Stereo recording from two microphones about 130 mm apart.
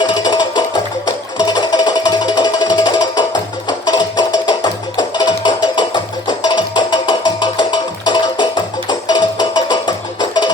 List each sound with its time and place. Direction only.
0.0 s music: 35° left (ahead or behind)